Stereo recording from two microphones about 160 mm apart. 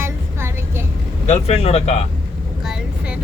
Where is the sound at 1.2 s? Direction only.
40° left (ahead or behind).